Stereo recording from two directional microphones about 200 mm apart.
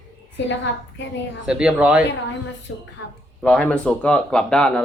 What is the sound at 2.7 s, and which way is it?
Speech, 75° left (ahead or behind).